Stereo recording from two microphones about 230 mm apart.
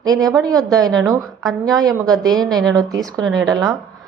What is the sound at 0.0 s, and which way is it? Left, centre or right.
A woman's voice, centre.